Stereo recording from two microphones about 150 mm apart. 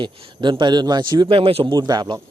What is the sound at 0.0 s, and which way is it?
A man's voice, 35° right (ahead or behind).